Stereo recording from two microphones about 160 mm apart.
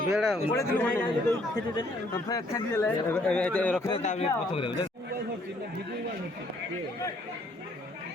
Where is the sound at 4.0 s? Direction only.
45° left (ahead or behind).